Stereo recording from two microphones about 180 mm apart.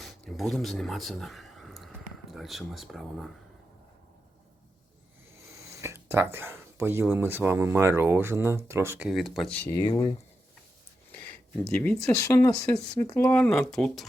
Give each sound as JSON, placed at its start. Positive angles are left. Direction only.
{"t": 0.0, "sound": "a sound", "side_deg": 0}
{"t": 2.3, "sound": "speech", "side_deg": 0}
{"t": 5.8, "sound": "speech", "side_deg": -15}
{"t": 9.8, "sound": "speech", "side_deg": 25}
{"t": 11.3, "sound": "a sound", "side_deg": 10}
{"t": 12.0, "sound": "speech", "side_deg": 15}
{"t": 12.5, "sound": "speech", "side_deg": 5}